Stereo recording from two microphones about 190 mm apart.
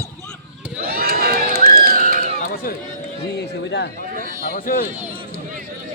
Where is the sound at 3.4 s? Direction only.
60° left (ahead or behind).